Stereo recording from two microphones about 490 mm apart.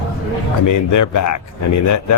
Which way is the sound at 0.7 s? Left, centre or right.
Left.